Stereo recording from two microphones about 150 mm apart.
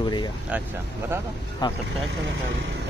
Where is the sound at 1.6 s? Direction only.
30° left (ahead or behind).